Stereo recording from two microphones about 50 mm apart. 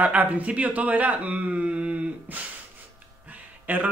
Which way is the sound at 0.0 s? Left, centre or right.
Right.